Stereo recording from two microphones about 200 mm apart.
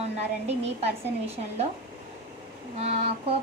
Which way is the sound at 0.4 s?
30° right (ahead or behind).